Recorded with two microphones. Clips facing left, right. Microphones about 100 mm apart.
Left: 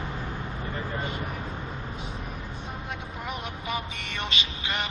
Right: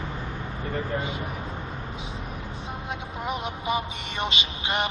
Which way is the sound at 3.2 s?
15° right (ahead or behind).